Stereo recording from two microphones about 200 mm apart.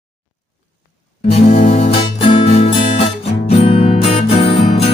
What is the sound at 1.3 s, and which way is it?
Music, 30° left (ahead or behind).